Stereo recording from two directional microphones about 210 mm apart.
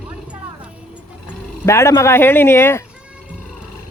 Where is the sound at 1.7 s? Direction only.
15° left (ahead or behind).